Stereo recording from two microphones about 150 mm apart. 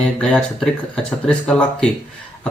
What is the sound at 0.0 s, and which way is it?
Speech, 5° left (ahead or behind).